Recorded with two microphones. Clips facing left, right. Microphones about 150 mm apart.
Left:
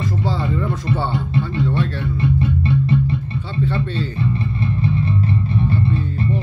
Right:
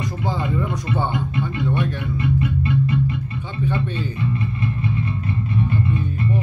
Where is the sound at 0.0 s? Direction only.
15° right (ahead or behind).